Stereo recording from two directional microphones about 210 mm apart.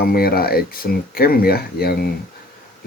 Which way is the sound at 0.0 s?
45° left (ahead or behind).